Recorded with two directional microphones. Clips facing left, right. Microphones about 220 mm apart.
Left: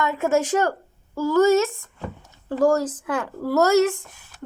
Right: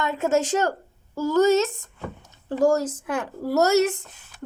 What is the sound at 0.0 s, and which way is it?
Speech, 20° right (ahead or behind).